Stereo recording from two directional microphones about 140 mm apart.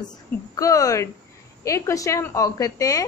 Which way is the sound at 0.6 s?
25° left (ahead or behind).